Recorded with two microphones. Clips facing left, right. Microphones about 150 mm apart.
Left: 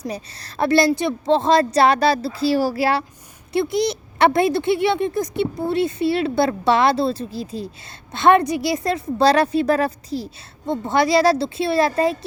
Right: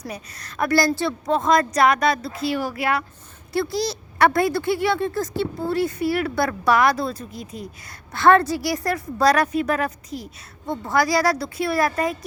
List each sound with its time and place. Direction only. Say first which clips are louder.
0.0 s a woman's voice: left 5 dB; 30° left (ahead or behind)
3.5 s speech: left 4 dB; 20° left (ahead or behind)
8.1 s speech: left 1 dB; 20° left (ahead or behind)